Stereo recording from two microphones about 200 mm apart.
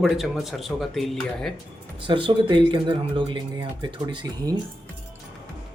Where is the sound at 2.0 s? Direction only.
25° right (ahead or behind).